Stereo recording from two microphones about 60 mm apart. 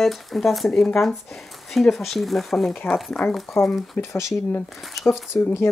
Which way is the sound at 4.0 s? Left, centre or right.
Left.